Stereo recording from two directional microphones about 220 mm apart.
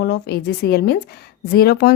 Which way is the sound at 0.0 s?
50° left (ahead or behind).